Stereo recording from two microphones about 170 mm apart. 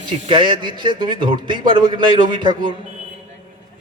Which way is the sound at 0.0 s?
30° right (ahead or behind).